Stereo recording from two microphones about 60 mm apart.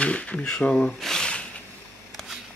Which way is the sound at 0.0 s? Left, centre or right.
Left.